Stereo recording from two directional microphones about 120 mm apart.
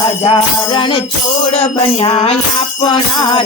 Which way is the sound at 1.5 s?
60° left (ahead or behind).